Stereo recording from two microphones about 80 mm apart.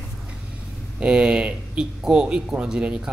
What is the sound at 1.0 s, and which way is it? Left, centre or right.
Speech, centre.